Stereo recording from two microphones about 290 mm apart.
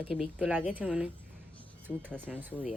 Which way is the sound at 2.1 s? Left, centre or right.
Centre.